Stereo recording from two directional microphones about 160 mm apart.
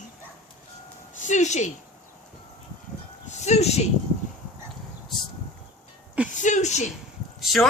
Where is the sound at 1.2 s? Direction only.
50° left (ahead or behind).